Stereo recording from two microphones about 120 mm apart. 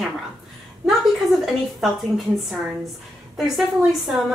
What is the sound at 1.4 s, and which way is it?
A woman's voice, centre (ahead or behind).